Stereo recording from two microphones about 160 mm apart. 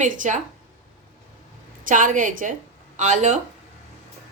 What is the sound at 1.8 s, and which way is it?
A woman's voice, 55° right (ahead or behind).